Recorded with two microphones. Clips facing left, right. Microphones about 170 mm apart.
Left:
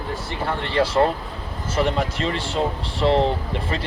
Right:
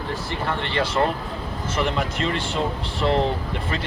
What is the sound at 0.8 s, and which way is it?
Speech, 30° left (ahead or behind).